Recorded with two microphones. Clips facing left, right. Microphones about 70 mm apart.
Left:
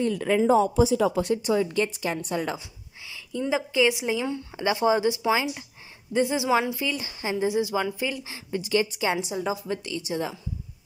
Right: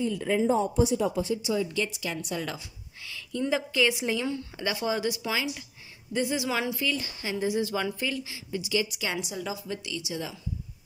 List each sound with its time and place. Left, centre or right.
0.0 s speech: left
1.3 s a woman's voice: left
3.3 s a woman's voice: centre
4.6 s speech: left
8.2 s a woman's voice: left